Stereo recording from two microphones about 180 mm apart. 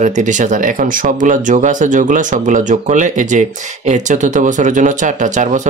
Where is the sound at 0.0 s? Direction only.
40° right (ahead or behind).